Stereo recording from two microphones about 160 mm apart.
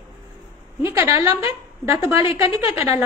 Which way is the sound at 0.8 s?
20° right (ahead or behind).